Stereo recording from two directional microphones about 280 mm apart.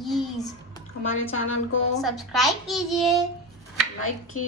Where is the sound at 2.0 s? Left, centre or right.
Centre.